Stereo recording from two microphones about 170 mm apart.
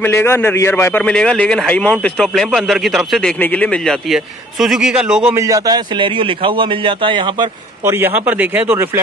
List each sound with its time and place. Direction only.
0.0 s a man's voice: 15° left (ahead or behind); by 5.3 s 5° right (ahead or behind)
5.3 s a man's voice: 20° right (ahead or behind)
7.8 s a man's voice: 15° right (ahead or behind)